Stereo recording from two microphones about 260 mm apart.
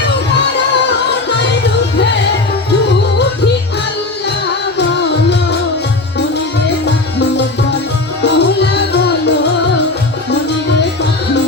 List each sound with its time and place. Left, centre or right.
0.5 s music: left
6.8 s music: left